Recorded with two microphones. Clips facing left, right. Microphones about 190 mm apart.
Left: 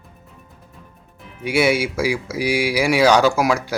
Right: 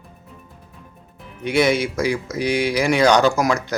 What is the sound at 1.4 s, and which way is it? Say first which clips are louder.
Speech: even; 5° left (ahead or behind).